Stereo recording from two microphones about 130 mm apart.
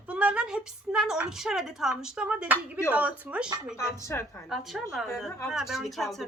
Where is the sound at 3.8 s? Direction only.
20° left (ahead or behind).